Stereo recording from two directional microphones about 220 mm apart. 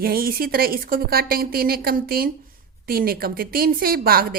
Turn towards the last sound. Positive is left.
turn(degrees=-40)  # may be behind; listen again after turning